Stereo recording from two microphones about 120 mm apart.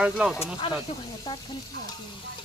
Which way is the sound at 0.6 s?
45° left (ahead or behind).